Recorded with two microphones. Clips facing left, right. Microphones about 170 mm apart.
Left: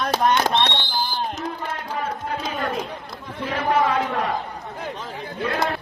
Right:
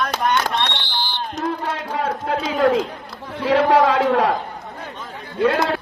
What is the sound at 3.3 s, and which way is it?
Speech, 80° right.